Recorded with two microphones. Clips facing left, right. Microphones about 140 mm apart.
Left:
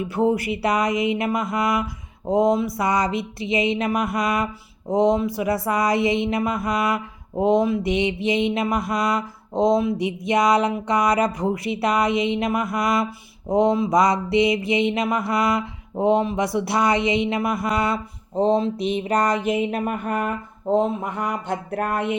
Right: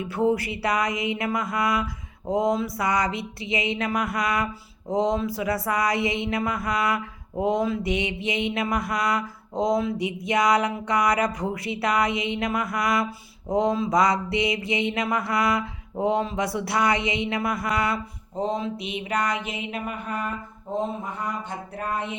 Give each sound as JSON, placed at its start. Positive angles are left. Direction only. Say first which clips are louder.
{"t": 0.1, "sound": "mantra", "louder": "left 2 dB", "side_deg": 20}